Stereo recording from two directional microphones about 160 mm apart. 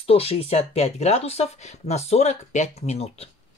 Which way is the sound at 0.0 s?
40° left (ahead or behind).